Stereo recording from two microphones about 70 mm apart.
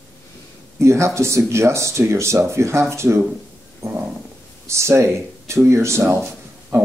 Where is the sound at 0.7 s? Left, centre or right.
Right.